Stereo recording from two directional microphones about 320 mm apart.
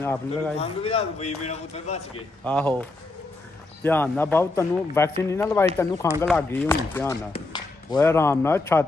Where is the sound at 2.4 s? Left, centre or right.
Centre.